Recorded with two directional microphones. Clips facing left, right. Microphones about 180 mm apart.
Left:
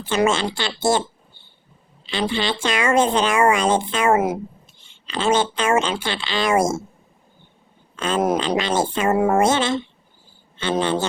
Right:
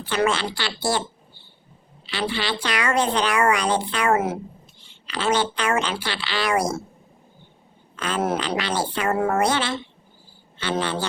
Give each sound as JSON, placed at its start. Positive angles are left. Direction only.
{"t": 0.1, "sound": "speech", "side_deg": 25}
{"t": 2.0, "sound": "speech", "side_deg": 25}
{"t": 5.1, "sound": "speech", "side_deg": 25}
{"t": 7.9, "sound": "speech", "side_deg": 25}